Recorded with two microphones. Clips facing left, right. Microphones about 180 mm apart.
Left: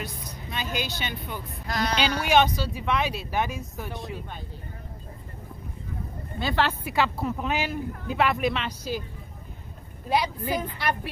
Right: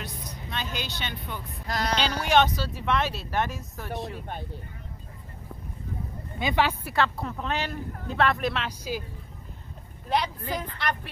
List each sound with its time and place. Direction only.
0.0 s speech: 10° left (ahead or behind)
6.4 s speech: 15° right (ahead or behind)
6.8 s speech: 5° left (ahead or behind)
10.0 s speech: 5° left (ahead or behind)